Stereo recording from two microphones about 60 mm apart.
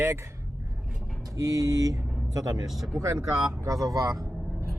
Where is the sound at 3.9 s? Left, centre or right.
Right.